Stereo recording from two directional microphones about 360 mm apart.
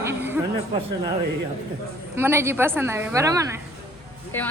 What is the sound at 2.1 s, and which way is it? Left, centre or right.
A woman's voice, centre.